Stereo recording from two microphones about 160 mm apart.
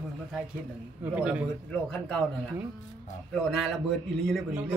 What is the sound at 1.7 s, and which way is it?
A man's voice, 5° left (ahead or behind).